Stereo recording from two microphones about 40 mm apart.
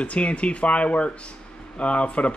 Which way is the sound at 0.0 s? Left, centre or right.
Left.